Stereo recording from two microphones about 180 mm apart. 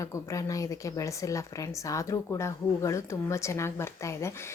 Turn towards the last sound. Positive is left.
turn(degrees=15)  # may be behind; listen again after turning